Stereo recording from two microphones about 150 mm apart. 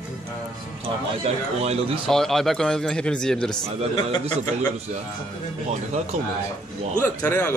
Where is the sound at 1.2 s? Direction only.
45° right (ahead or behind).